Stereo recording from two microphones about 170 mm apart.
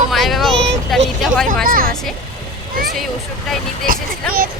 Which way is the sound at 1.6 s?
60° right (ahead or behind).